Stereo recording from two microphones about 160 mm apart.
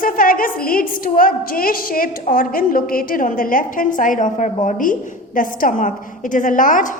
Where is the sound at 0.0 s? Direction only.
60° left (ahead or behind).